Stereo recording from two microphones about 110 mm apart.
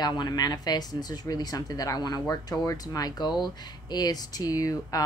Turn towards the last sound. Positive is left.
turn(degrees=30)  # may be behind; listen again after turning